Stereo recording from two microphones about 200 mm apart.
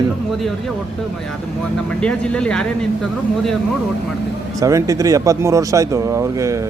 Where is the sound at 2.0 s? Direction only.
5° left (ahead or behind).